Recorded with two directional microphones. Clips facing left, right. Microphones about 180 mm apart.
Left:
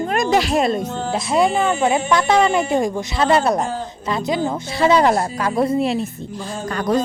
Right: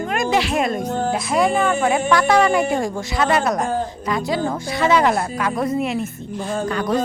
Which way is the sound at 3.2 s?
30° left (ahead or behind).